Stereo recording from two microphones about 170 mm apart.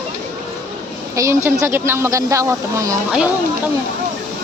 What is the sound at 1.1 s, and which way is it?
Speech, 15° right (ahead or behind).